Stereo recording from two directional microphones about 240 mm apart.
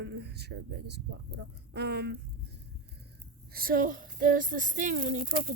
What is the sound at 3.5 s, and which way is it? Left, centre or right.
Speech, right.